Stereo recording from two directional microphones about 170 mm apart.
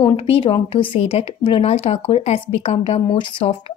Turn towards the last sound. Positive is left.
turn(degrees=30)  # may be behind; listen again after turning